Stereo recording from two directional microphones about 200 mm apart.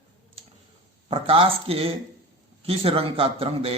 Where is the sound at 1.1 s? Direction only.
25° right (ahead or behind).